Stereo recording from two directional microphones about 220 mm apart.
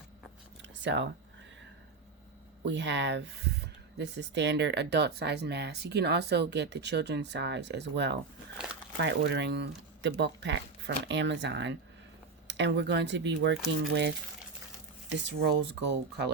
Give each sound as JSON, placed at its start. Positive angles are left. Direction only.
{"t": 0.8, "sound": "speech", "side_deg": -55}
{"t": 2.6, "sound": "speech", "side_deg": -50}
{"t": 15.1, "sound": "speech", "side_deg": -50}